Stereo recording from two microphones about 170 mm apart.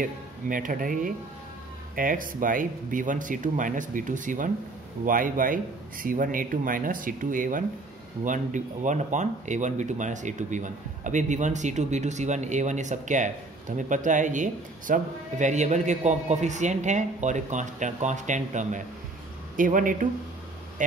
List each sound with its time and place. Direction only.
0.0 s speech: 50° right (ahead or behind)